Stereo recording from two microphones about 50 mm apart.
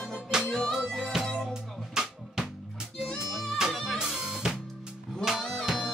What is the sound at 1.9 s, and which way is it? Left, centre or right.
Drum, centre.